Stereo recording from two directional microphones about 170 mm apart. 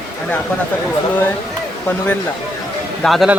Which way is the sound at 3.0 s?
Centre (ahead or behind).